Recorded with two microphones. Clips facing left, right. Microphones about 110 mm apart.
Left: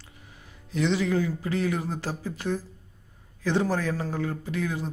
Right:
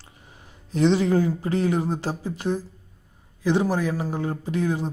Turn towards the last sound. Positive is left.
turn(degrees=-25)  # may be behind; listen again after turning